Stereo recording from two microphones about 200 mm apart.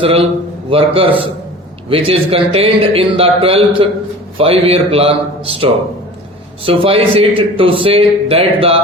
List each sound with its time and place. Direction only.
0.0 s a man's voice: 30° right (ahead or behind)